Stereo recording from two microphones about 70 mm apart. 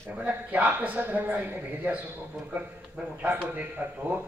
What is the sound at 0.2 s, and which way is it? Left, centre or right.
A man's voice, right.